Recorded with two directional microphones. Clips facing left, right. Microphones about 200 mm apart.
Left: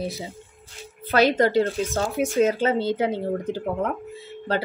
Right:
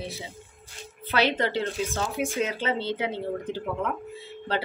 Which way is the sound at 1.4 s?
45° left (ahead or behind).